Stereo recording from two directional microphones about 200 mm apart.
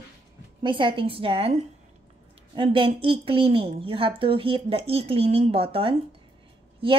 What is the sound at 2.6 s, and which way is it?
A woman's voice, 25° right (ahead or behind).